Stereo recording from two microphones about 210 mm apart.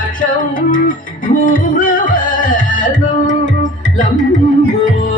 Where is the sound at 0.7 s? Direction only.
40° left (ahead or behind).